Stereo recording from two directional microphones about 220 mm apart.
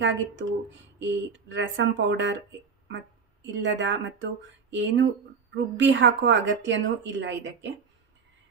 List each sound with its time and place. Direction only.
0.0 s speech: 55° right (ahead or behind)
3.5 s speech: 55° right (ahead or behind)